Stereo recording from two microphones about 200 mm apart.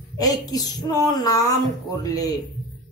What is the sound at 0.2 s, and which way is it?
Speech, 20° left (ahead or behind).